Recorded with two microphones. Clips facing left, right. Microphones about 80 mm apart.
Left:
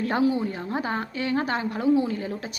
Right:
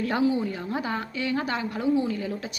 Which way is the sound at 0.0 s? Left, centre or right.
Left.